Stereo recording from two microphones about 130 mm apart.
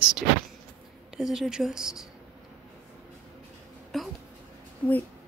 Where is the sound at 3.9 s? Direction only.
Centre (ahead or behind).